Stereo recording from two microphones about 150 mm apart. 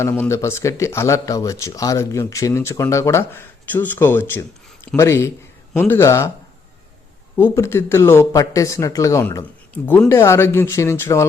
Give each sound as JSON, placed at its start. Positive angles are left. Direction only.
{"t": 0.0, "sound": "speech", "side_deg": 15}
{"t": 7.3, "sound": "speech", "side_deg": 15}
{"t": 9.7, "sound": "speech", "side_deg": 10}